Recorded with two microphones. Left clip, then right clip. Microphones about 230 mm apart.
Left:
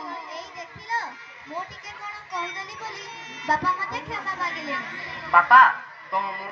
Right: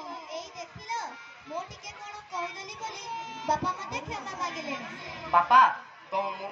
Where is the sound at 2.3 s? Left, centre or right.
Right.